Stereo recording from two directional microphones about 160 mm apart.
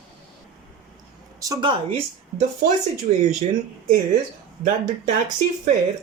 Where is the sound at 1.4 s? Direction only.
20° right (ahead or behind).